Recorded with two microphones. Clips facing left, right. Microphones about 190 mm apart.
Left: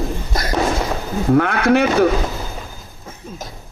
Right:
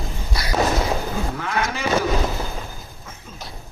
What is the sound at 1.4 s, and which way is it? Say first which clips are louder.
Speech: left 11 dB; 65° left (ahead or behind).